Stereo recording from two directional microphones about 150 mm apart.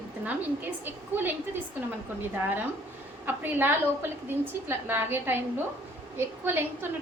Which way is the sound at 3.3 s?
15° right (ahead or behind).